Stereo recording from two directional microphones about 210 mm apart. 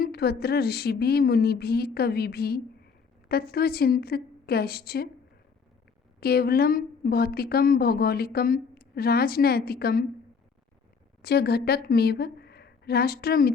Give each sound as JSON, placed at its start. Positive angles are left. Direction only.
{"t": 0.0, "sound": "a woman's voice", "side_deg": 50}
{"t": 6.1, "sound": "a woman's voice", "side_deg": 50}
{"t": 11.2, "sound": "speech", "side_deg": 50}